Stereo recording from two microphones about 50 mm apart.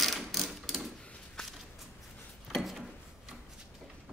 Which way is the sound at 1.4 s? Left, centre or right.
Centre.